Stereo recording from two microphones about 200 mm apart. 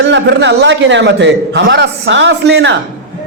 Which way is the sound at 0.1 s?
60° right (ahead or behind).